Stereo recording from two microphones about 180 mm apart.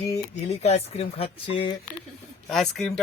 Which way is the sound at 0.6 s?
35° left (ahead or behind).